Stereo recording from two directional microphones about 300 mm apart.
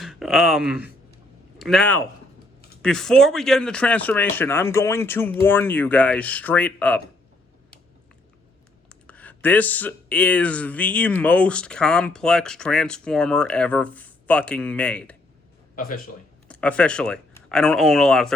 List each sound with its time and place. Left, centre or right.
0.0 s speech: centre
8.9 s speech: centre
15.7 s speech: left
16.5 s speech: centre